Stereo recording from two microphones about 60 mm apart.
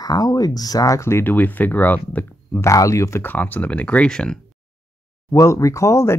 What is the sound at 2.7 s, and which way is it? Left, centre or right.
Speech, left.